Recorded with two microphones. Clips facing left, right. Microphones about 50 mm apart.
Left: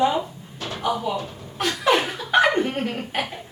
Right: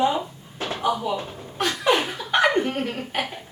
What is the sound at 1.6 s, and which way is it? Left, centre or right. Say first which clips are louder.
Chuckle: even; centre.